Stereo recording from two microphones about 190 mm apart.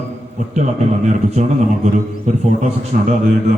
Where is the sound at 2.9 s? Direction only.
45° right (ahead or behind).